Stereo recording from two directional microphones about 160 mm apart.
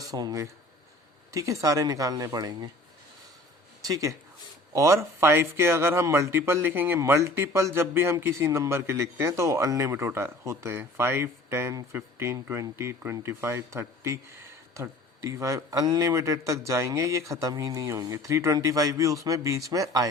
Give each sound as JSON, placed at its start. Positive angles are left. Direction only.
{"t": 0.0, "sound": "a man's voice", "side_deg": -25}
{"t": 3.8, "sound": "a man's voice", "side_deg": -20}